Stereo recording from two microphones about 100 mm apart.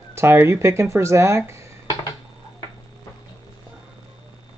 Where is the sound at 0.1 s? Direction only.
25° right (ahead or behind).